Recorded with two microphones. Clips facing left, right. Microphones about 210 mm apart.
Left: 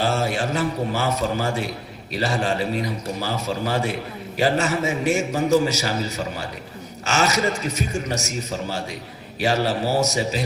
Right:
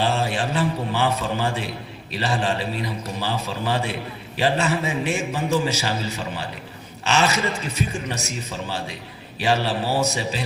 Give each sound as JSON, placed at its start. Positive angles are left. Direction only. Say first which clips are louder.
{"t": 0.0, "sound": "a man's voice", "louder": "left 1 dB", "side_deg": 40}